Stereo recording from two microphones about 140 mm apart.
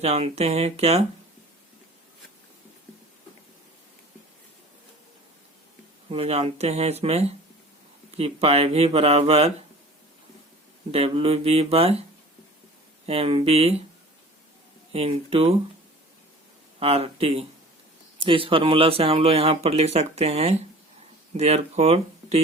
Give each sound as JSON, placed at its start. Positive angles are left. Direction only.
{"t": 0.0, "sound": "speech", "side_deg": -50}
{"t": 6.1, "sound": "speech", "side_deg": -45}
{"t": 10.9, "sound": "speech", "side_deg": -45}
{"t": 13.1, "sound": "speech", "side_deg": -45}
{"t": 14.9, "sound": "speech", "side_deg": -40}
{"t": 16.8, "sound": "speech", "side_deg": -45}